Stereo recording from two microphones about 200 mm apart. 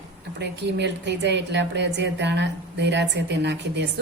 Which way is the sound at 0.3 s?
60° right (ahead or behind).